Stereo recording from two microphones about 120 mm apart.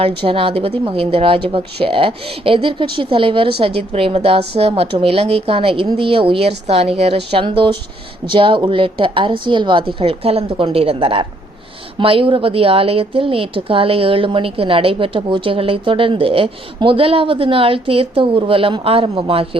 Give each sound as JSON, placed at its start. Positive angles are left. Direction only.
{"t": 0.0, "sound": "a woman's voice", "side_deg": -45}
{"t": 7.4, "sound": "a woman's voice", "side_deg": -40}